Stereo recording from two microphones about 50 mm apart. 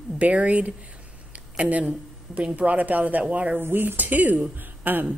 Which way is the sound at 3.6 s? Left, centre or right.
Right.